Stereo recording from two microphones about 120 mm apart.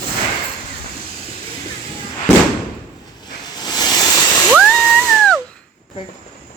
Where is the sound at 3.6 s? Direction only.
35° left (ahead or behind).